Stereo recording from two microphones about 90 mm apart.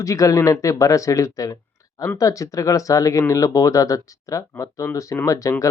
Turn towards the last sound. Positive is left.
turn(degrees=35)  # may be behind; listen again after turning